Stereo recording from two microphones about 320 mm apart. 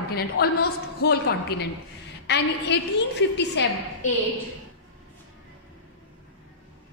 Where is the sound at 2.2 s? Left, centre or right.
Left.